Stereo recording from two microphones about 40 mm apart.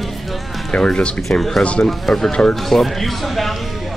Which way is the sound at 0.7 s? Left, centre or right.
Left.